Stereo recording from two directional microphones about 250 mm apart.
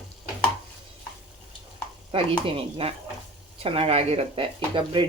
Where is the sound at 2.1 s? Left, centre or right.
Right.